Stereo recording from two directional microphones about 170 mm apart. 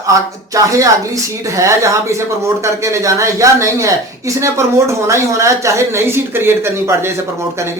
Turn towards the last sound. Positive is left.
turn(degrees=-15)  # may be behind; listen again after turning